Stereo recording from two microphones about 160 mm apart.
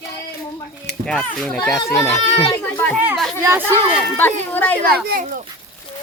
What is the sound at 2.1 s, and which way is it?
Speech, 45° left (ahead or behind).